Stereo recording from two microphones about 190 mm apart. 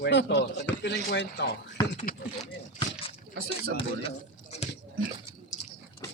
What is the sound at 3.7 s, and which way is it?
Speech, 30° left (ahead or behind).